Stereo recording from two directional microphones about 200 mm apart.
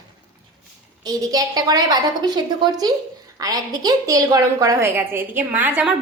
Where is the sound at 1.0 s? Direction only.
20° right (ahead or behind).